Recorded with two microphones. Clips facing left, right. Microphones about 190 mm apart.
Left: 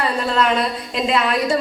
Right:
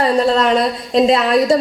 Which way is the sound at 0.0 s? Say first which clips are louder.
Right 6 dB; 35° right (ahead or behind).